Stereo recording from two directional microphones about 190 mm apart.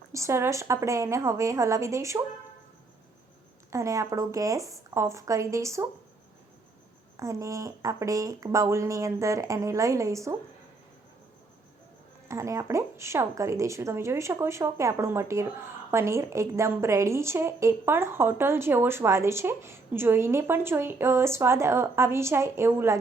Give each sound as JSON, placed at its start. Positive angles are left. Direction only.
{"t": 0.1, "sound": "a woman's voice", "side_deg": -15}
{"t": 3.7, "sound": "a woman's voice", "side_deg": -15}
{"t": 7.2, "sound": "a woman's voice", "side_deg": -15}
{"t": 12.3, "sound": "a woman's voice", "side_deg": -15}